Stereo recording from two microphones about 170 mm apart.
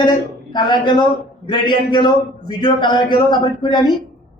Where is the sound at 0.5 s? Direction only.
25° left (ahead or behind).